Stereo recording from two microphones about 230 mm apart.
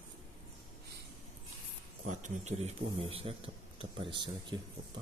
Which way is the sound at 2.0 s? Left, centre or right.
Right.